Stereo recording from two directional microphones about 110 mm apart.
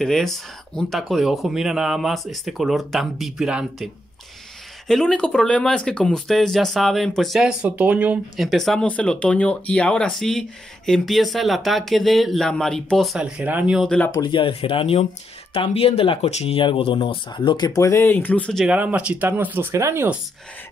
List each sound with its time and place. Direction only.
0.0 s speech: centre (ahead or behind)
4.8 s speech: 5° left (ahead or behind); by 8.2 s 10° right (ahead or behind)
8.4 s speech: centre (ahead or behind)
13.2 s speech: 15° right (ahead or behind)
13.8 s speech: 10° left (ahead or behind)
14.1 s speech: 40° left (ahead or behind)
14.4 s speech: 55° left (ahead or behind)
16.3 s speech: 70° left (ahead or behind); by 17.6 s 45° left (ahead or behind)
17.6 s speech: 30° left (ahead or behind); by 18.7 s 10° left (ahead or behind)
18.7 s speech: 15° right (ahead or behind)